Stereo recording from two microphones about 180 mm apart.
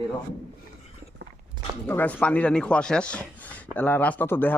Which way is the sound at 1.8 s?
10° left (ahead or behind).